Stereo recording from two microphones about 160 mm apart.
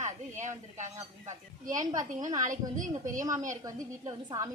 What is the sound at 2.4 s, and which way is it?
Speech, 55° right (ahead or behind).